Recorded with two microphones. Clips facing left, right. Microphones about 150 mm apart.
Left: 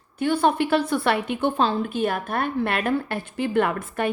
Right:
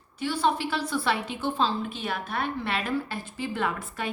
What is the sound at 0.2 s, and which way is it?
A woman's voice, 55° left (ahead or behind).